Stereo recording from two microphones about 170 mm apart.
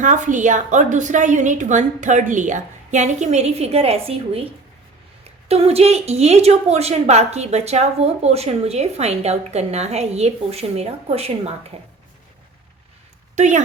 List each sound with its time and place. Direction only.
0.0 s a woman's voice: 45° right (ahead or behind)
5.5 s a woman's voice: 35° right (ahead or behind)
13.3 s speech: 45° right (ahead or behind)